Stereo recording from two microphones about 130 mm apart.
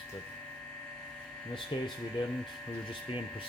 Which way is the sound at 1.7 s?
45° left (ahead or behind).